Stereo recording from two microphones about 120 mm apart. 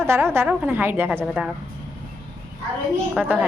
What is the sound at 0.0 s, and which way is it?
A woman's voice, 20° right (ahead or behind).